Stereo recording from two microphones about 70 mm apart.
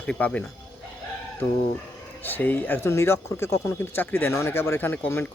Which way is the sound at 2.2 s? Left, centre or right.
Left.